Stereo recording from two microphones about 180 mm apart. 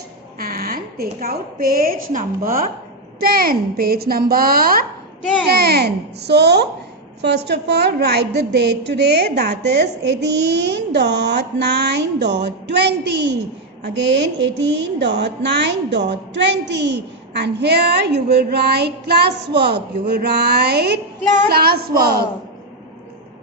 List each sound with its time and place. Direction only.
0.3 s a woman's voice: 55° right (ahead or behind)